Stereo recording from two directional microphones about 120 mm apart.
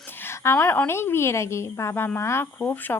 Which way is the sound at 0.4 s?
20° left (ahead or behind).